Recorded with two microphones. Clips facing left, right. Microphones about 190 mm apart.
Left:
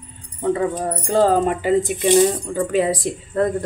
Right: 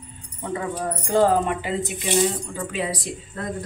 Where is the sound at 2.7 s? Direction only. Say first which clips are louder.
Left 9 dB; 50° left (ahead or behind).